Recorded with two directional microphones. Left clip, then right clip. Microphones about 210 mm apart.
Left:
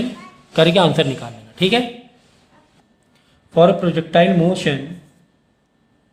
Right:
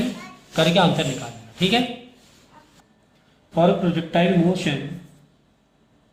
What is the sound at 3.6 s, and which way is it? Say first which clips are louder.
A man's voice: left 6 dB; 55° left (ahead or behind).